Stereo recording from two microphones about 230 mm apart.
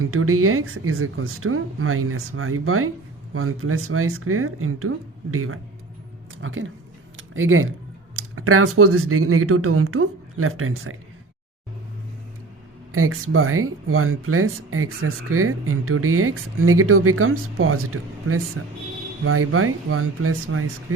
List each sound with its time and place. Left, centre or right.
0.0 s a woman's voice: right
12.9 s speech: right